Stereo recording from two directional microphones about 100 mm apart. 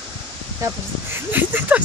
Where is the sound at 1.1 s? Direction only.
20° right (ahead or behind).